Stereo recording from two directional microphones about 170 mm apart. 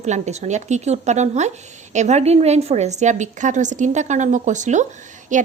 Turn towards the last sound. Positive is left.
turn(degrees=-50)  # may be behind; listen again after turning